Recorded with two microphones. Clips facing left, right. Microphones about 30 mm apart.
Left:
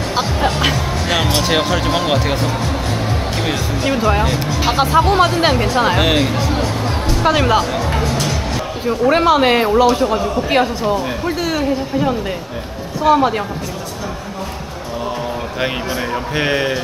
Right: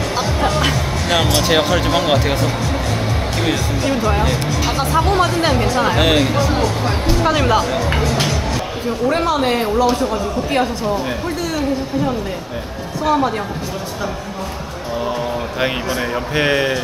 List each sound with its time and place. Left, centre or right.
0.1 s music: centre
3.4 s speech: centre
5.9 s speech: centre
7.2 s speech: centre
8.8 s speech: centre
16.3 s speech: centre